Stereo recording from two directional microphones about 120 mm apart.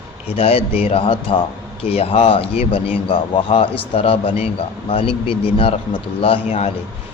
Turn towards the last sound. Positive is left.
turn(degrees=60)  # may be behind; listen again after turning